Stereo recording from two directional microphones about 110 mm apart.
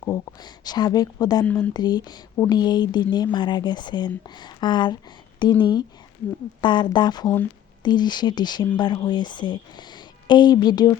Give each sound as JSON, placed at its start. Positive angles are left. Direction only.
{"t": 0.0, "sound": "speech", "side_deg": 30}
{"t": 1.5, "sound": "speech", "side_deg": 15}
{"t": 1.7, "sound": "speech", "side_deg": 40}